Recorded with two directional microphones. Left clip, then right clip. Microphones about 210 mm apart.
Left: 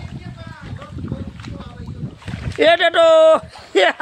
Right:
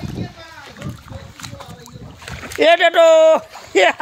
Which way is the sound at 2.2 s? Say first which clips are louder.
Right 4 dB; 55° right (ahead or behind).